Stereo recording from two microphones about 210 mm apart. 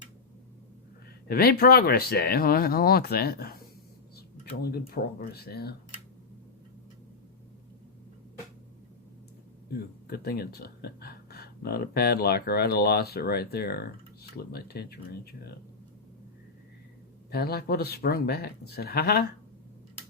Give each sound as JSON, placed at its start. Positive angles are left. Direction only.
{"t": 1.3, "sound": "speech", "side_deg": 45}
{"t": 4.6, "sound": "speech", "side_deg": 45}
{"t": 9.7, "sound": "speech", "side_deg": 50}
{"t": 17.3, "sound": "speech", "side_deg": 50}